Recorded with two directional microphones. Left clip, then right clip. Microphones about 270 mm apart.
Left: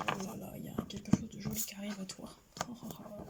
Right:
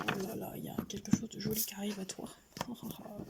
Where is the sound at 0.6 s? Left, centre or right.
Right.